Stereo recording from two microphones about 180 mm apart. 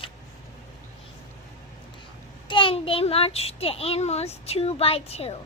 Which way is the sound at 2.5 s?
30° left (ahead or behind).